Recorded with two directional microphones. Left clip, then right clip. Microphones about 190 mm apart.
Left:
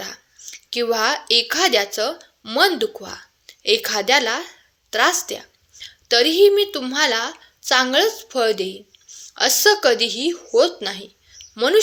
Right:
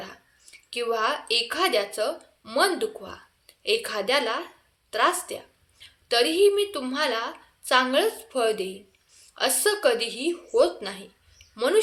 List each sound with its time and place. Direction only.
0.0 s a woman's voice: 30° left (ahead or behind)